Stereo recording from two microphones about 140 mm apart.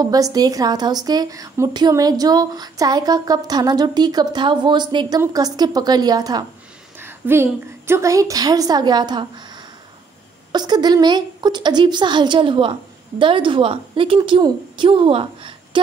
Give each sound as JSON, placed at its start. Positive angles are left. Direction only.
{"t": 0.0, "sound": "speech", "side_deg": -25}
{"t": 7.0, "sound": "speech", "side_deg": -15}
{"t": 10.5, "sound": "a woman's voice", "side_deg": -30}